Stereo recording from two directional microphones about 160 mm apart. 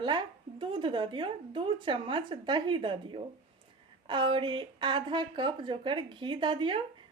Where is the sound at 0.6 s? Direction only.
30° right (ahead or behind).